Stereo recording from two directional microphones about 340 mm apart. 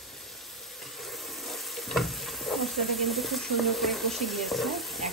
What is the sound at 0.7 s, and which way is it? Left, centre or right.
Frying, centre.